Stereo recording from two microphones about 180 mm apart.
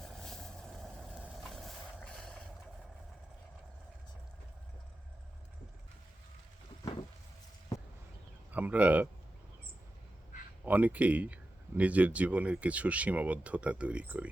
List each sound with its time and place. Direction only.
0.0 s vehicle: centre (ahead or behind)
8.5 s speech: 10° right (ahead or behind)
10.7 s speech: 10° right (ahead or behind)